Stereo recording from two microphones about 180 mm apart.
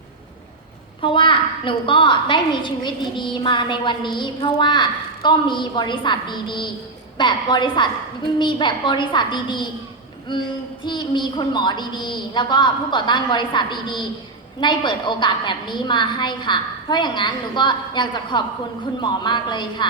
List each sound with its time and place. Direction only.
1.0 s a woman's voice: 30° left (ahead or behind)